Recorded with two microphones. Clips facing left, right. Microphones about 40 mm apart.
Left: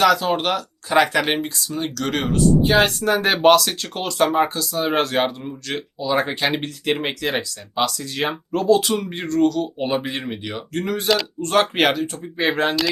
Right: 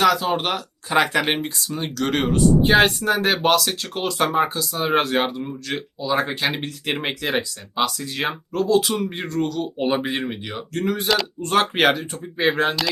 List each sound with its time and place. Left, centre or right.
0.0 s speech: centre; by 2.9 s right
3.0 s speech: centre
6.2 s speech: centre
6.6 s speech: centre